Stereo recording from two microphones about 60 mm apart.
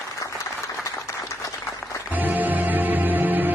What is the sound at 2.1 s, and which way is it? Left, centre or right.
Music, right.